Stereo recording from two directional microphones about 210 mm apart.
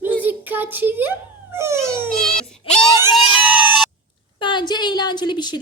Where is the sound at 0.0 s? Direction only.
10° right (ahead or behind).